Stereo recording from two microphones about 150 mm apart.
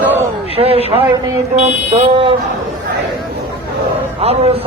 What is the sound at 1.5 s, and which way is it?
Speech, 40° right (ahead or behind).